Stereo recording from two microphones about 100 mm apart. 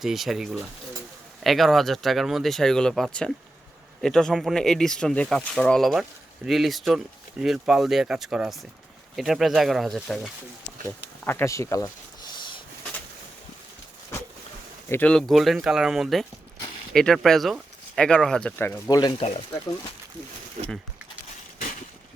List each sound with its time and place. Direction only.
0.0 s speech: centre (ahead or behind)
10.8 s speech: 25° left (ahead or behind)
12.3 s vehicle: 50° left (ahead or behind)
15.0 s speech: 5° left (ahead or behind)
18.9 s speech: 40° left (ahead or behind)
19.1 s speech: 90° left